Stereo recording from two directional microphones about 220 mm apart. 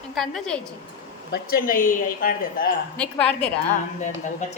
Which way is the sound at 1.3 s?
40° left (ahead or behind).